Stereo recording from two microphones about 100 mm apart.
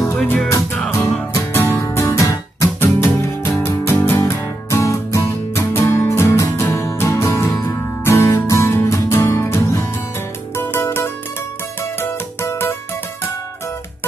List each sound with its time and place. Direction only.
0.7 s music: 5° left (ahead or behind)
1.3 s music: 25° left (ahead or behind)